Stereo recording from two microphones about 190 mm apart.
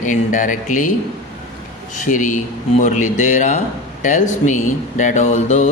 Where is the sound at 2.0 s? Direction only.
40° left (ahead or behind).